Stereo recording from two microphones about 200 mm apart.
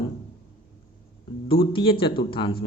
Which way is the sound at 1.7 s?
25° left (ahead or behind).